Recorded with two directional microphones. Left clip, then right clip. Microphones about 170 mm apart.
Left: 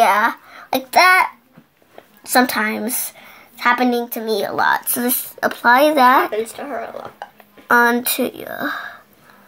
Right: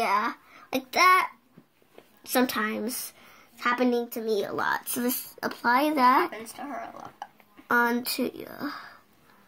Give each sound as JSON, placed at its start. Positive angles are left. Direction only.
{"t": 0.0, "sound": "a child's voice", "side_deg": 5}
{"t": 2.2, "sound": "speech", "side_deg": 0}
{"t": 7.6, "sound": "speech", "side_deg": 0}